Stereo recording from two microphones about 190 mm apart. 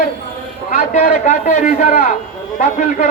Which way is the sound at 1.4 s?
40° left (ahead or behind).